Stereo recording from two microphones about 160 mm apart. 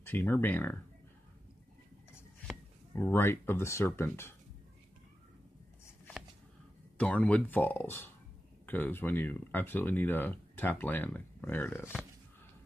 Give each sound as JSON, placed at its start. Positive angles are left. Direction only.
{"t": 0.0, "sound": "speech", "side_deg": 15}
{"t": 2.9, "sound": "speech", "side_deg": 15}
{"t": 7.0, "sound": "speech", "side_deg": 10}
{"t": 11.8, "sound": "speech", "side_deg": -5}